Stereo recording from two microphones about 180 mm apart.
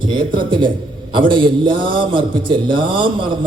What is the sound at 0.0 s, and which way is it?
A man's voice, 25° right (ahead or behind).